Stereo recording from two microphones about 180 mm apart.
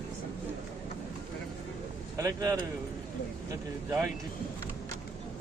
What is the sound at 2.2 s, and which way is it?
Speech, 15° right (ahead or behind).